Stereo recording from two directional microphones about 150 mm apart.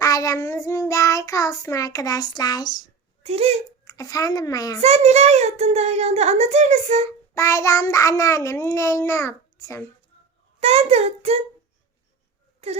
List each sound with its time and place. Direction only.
0.0 s child singing: 20° left (ahead or behind)
3.2 s speech: 40° right (ahead or behind)
3.8 s child singing: 25° left (ahead or behind)
4.8 s a child's voice: 45° right (ahead or behind)
7.3 s child singing: 20° left (ahead or behind)
10.6 s a child's voice: 45° right (ahead or behind)